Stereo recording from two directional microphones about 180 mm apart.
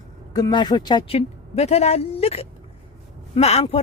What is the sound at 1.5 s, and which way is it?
A woman's voice, 35° left (ahead or behind).